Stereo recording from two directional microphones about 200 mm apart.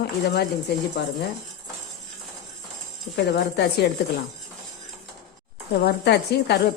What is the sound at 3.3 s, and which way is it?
Speech, 55° left (ahead or behind).